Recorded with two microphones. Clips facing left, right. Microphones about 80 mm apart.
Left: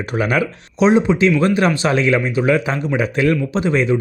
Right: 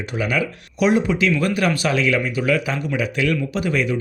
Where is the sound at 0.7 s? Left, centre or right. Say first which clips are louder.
Left 4 dB; left.